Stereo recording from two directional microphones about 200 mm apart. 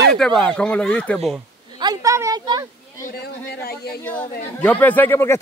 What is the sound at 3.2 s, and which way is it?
Speech, 50° left (ahead or behind).